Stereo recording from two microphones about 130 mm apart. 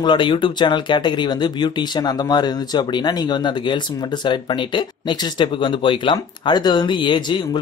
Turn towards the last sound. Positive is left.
turn(degrees=35)  # may be behind; listen again after turning